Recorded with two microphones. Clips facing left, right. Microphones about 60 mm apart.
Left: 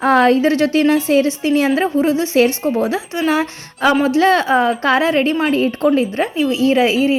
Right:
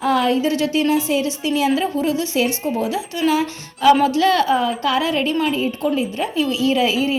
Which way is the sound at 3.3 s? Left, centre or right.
Left.